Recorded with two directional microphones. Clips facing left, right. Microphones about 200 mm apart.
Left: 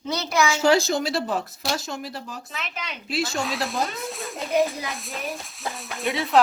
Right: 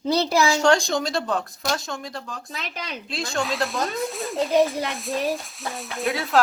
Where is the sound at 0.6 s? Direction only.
5° left (ahead or behind).